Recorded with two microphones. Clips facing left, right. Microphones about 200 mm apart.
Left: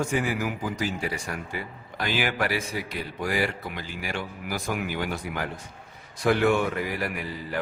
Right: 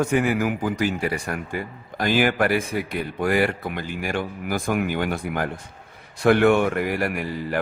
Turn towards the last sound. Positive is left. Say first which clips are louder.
# right 6 dB
turn(degrees=-50)  # may be behind; listen again after turning